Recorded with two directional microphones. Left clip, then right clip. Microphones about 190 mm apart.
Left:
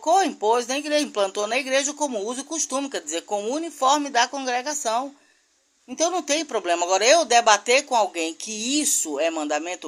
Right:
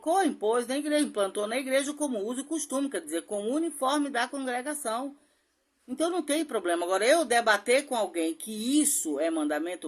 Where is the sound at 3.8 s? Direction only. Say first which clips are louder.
Left 10 dB; 20° right (ahead or behind).